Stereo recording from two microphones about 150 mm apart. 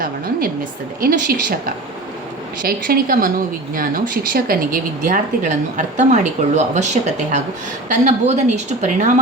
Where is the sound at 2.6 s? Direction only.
75° right (ahead or behind).